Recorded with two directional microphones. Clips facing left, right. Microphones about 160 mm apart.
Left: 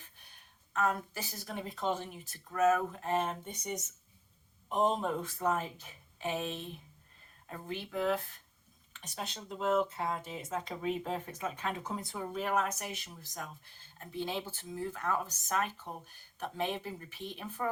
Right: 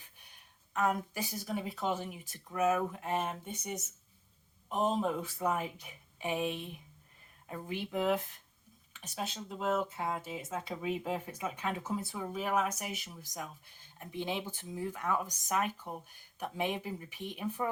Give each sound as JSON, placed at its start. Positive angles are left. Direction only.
{"t": 0.7, "sound": "speech", "side_deg": -15}
{"t": 9.0, "sound": "speech", "side_deg": -5}